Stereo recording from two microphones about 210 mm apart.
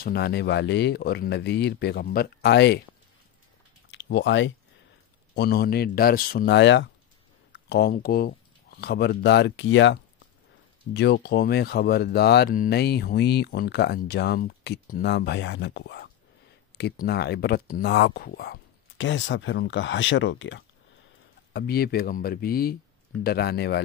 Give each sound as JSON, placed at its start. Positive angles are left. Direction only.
{"t": 0.0, "sound": "speech", "side_deg": 50}
{"t": 3.9, "sound": "speech", "side_deg": 60}
{"t": 21.5, "sound": "speech", "side_deg": 50}